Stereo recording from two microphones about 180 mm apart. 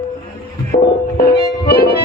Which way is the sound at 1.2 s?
60° left (ahead or behind).